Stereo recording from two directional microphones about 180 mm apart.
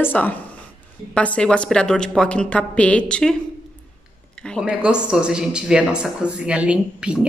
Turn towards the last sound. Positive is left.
turn(degrees=-5)  # may be behind; listen again after turning